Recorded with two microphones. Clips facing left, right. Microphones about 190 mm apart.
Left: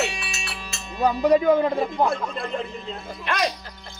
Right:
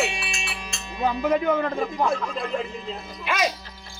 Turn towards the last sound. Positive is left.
turn(degrees=-5)  # may be behind; listen again after turning